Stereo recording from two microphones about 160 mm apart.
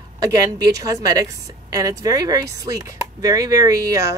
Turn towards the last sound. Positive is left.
turn(degrees=-20)  # may be behind; listen again after turning